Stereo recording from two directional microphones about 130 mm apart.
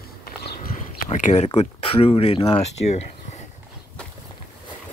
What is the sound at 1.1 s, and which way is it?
Speech, 55° left (ahead or behind).